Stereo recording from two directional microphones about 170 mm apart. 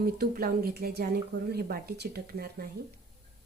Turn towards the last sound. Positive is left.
turn(degrees=-65)  # may be behind; listen again after turning